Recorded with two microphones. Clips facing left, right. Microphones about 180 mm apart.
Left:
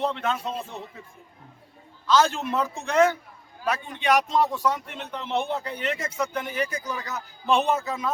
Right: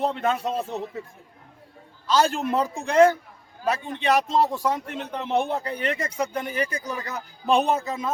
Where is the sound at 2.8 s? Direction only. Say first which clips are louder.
Right 4 dB; 35° right (ahead or behind).